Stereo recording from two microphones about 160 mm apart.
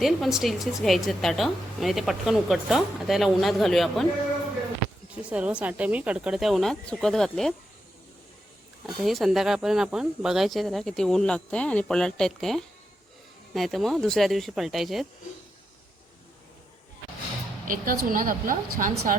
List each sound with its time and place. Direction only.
0.0 s a woman's voice: centre (ahead or behind)
5.3 s a woman's voice: 5° right (ahead or behind)
9.0 s a woman's voice: centre (ahead or behind)
17.7 s a woman's voice: 60° right (ahead or behind)